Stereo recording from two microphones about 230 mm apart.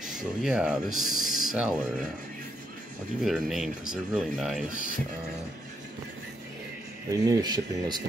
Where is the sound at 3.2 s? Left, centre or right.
Centre.